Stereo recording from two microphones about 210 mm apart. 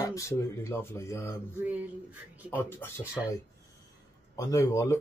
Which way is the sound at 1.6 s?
5° right (ahead or behind).